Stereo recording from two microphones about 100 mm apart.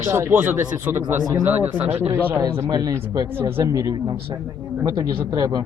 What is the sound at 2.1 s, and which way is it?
Speech, 30° right (ahead or behind).